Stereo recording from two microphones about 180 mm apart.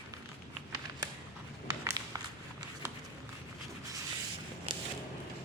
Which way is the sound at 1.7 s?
20° right (ahead or behind).